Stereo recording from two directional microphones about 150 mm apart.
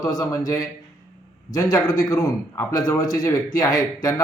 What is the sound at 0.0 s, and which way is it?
Speech, 25° left (ahead or behind).